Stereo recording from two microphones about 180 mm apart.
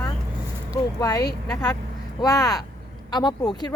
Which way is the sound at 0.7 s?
20° left (ahead or behind).